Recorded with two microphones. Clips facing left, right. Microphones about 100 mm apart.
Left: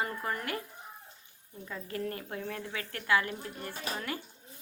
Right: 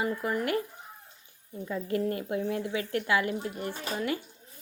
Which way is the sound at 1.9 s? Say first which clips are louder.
Right 7 dB; 25° right (ahead or behind).